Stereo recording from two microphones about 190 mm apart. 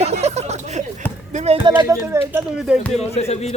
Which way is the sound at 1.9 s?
15° right (ahead or behind).